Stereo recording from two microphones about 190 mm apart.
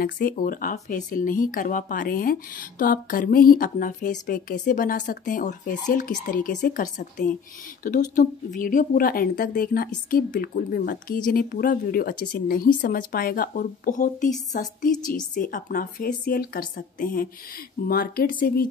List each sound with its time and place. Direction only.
0.0 s speech: 45° left (ahead or behind)